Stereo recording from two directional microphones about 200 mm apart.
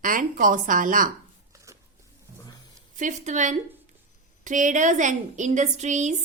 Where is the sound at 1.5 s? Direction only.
15° right (ahead or behind).